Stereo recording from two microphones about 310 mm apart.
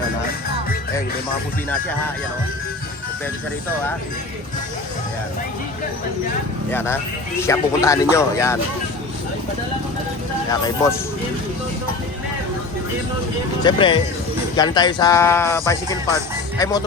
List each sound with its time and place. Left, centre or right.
6.7 s speech: centre
13.7 s speech: centre